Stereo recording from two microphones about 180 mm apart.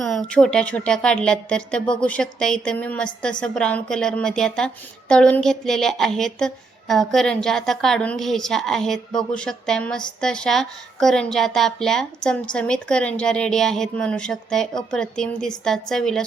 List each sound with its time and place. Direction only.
0.0 s a woman's voice: centre (ahead or behind)